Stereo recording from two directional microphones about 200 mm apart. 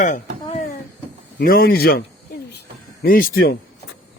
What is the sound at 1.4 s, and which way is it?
Speech, 50° left (ahead or behind).